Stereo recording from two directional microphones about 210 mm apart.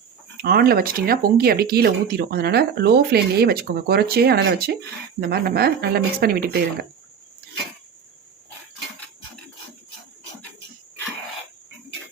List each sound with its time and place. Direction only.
0.3 s speech: 45° right (ahead or behind)